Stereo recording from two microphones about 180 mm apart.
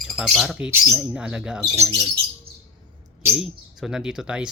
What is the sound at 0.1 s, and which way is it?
Speech, centre (ahead or behind).